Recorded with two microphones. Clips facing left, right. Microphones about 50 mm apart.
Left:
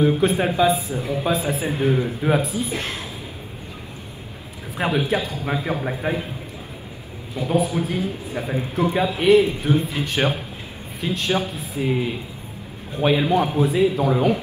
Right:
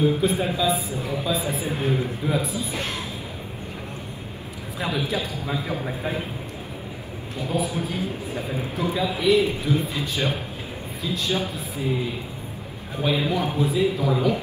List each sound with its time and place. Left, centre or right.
0.0 s a man's voice: left
2.2 s a man's voice: left
4.7 s a man's voice: left
7.3 s a man's voice: left
13.0 s a man's voice: left